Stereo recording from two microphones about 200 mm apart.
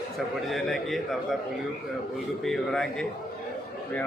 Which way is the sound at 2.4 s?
Centre (ahead or behind).